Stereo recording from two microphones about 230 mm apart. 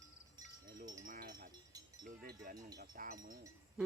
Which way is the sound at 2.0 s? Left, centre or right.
Right.